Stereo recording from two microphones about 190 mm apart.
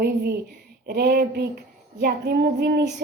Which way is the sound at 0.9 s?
60° right (ahead or behind).